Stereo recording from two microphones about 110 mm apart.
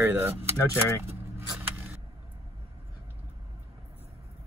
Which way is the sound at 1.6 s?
15° right (ahead or behind).